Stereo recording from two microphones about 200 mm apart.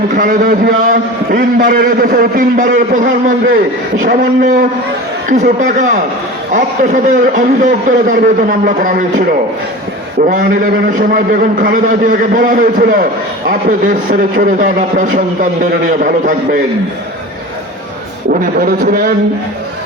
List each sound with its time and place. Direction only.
0.2 s a man's voice: 45° right (ahead or behind)
11.1 s a man's voice: 45° right (ahead or behind)
18.3 s a man's voice: 45° right (ahead or behind)